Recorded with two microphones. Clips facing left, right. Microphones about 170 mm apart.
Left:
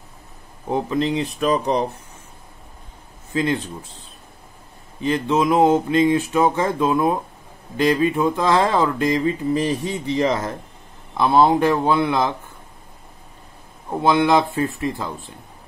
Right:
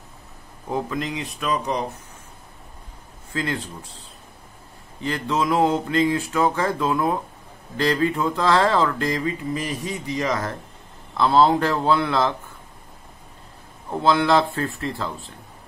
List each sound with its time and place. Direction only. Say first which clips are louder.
0.7 s speech: left 5 dB; 20° left (ahead or behind)
3.3 s speech: left 5 dB; 20° left (ahead or behind)
5.0 s speech: left 5 dB; 20° left (ahead or behind)
13.8 s speech: left 2 dB; 15° left (ahead or behind)